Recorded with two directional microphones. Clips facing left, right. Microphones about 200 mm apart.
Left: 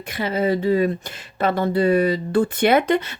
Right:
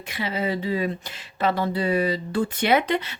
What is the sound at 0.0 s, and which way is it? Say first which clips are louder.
Speech: left 5 dB; 50° left (ahead or behind).